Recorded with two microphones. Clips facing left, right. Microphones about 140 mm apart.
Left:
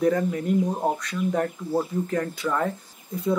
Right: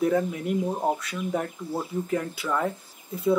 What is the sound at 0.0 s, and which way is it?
Speech, 5° right (ahead or behind).